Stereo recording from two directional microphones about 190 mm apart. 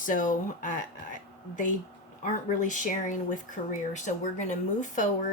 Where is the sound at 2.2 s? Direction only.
45° left (ahead or behind).